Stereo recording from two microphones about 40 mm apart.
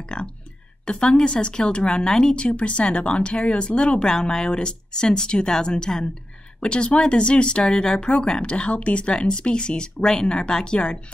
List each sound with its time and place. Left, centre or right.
0.0 s speech: left
2.4 s speech: left